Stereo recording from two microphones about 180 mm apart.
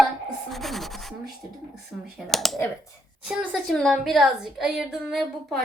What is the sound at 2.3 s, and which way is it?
A woman's voice, centre (ahead or behind).